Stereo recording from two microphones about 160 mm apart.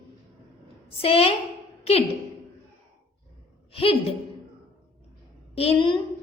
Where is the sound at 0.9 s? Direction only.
35° left (ahead or behind).